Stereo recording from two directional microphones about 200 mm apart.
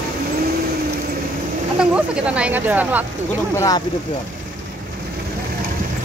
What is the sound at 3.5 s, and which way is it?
Speech, 15° left (ahead or behind).